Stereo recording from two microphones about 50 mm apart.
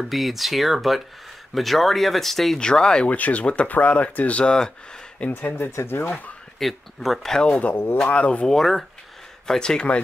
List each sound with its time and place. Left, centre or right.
0.0 s speech: centre
2.6 s speech: centre
3.1 s speech: left
5.9 s speech: left
6.6 s speech: centre
7.3 s speech: centre
7.7 s speech: left
8.0 s speech: left
8.5 s speech: centre; by 10.0 s left